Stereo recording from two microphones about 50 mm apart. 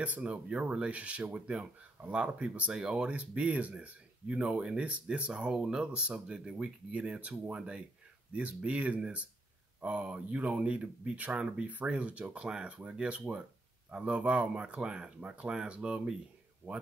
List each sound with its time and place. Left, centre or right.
0.0 s speech: right